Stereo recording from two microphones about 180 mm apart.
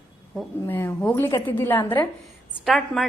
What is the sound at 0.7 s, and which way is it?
A woman's voice, 10° left (ahead or behind).